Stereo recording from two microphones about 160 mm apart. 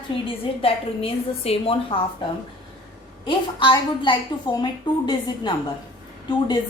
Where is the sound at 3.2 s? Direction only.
30° left (ahead or behind).